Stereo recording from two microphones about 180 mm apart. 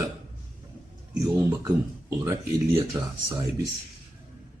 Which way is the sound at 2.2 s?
15° right (ahead or behind).